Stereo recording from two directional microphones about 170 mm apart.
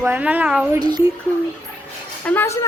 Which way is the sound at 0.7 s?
25° right (ahead or behind).